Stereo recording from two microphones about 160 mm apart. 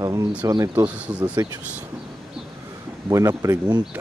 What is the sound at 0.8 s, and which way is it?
Speech, 10° right (ahead or behind).